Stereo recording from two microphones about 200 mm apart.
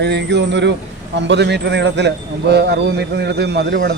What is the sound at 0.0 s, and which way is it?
A man's voice, 55° right (ahead or behind).